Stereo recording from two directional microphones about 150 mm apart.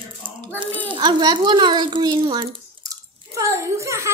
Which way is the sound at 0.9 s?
30° right (ahead or behind).